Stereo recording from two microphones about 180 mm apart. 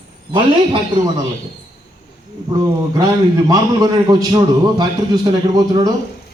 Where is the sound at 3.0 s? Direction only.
20° right (ahead or behind).